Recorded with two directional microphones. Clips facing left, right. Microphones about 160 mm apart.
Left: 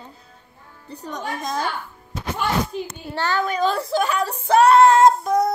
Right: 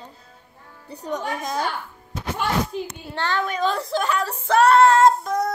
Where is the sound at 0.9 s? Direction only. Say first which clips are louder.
Right 2 dB; 10° right (ahead or behind).